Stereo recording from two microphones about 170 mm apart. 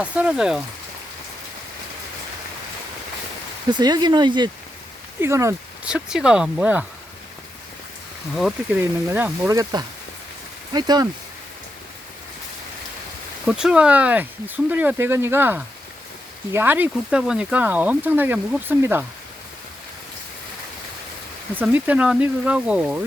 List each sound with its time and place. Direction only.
0.0 s speech: 5° right (ahead or behind)
3.7 s speech: 25° right (ahead or behind)
5.8 s speech: 5° right (ahead or behind)
8.4 s speech: centre (ahead or behind)
8.8 s speech: 15° right (ahead or behind)
13.5 s speech: 5° right (ahead or behind)
21.5 s speech: 10° right (ahead or behind)